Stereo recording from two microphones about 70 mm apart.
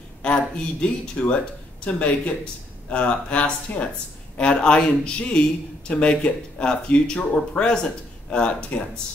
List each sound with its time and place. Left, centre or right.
0.2 s speech: centre